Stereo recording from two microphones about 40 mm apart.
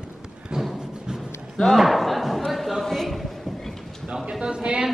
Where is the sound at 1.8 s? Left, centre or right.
Centre.